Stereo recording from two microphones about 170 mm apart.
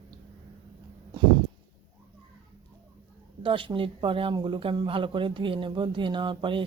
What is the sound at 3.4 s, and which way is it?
A woman's voice, 30° right (ahead or behind).